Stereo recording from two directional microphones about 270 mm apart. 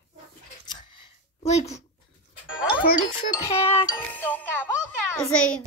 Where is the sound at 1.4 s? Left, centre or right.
Left.